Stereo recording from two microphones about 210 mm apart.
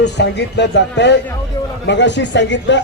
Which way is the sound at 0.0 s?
55° left (ahead or behind).